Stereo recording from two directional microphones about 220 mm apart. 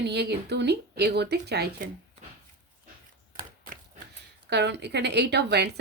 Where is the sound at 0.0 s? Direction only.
50° right (ahead or behind).